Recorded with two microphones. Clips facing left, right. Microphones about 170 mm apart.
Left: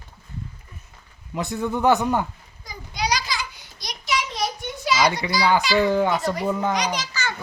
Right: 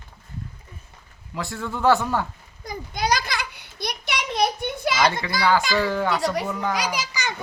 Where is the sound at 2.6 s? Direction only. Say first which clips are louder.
Right 2 dB; 50° right (ahead or behind).